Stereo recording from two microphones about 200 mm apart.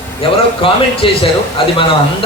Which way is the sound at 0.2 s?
30° left (ahead or behind).